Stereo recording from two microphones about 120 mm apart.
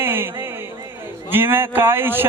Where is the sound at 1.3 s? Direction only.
20° right (ahead or behind).